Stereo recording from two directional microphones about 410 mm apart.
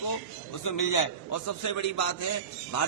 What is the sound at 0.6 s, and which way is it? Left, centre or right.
A man's voice, left.